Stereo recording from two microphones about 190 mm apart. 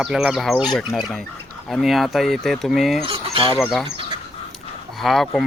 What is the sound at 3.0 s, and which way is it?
Speech, 30° right (ahead or behind).